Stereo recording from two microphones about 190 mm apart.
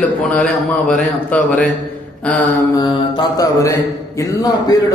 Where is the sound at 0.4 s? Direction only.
5° left (ahead or behind).